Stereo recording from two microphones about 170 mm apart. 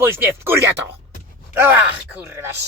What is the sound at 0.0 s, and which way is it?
Speech, 15° right (ahead or behind).